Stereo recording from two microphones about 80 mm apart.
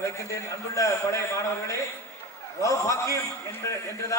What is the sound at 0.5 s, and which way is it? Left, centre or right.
A man's voice, left.